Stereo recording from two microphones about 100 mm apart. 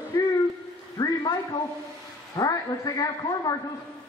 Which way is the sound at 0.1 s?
35° left (ahead or behind).